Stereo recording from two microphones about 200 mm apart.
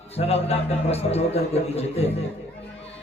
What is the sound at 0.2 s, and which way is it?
A man's voice, 30° left (ahead or behind).